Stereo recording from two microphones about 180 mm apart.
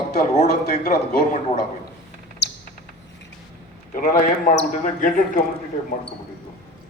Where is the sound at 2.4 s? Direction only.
70° left (ahead or behind).